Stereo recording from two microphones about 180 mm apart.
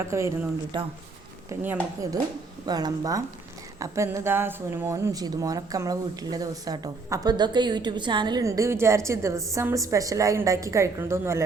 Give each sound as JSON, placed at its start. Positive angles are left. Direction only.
{"t": 0.0, "sound": "speech", "side_deg": -15}